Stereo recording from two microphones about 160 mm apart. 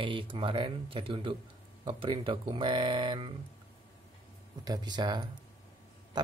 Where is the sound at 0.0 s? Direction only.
30° right (ahead or behind).